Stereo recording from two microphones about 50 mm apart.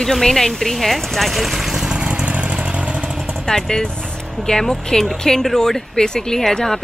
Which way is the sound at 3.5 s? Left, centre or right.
Centre.